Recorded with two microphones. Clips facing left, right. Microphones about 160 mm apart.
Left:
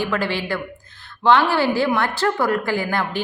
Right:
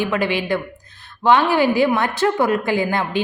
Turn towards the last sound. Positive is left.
turn(degrees=-20)  # may be behind; listen again after turning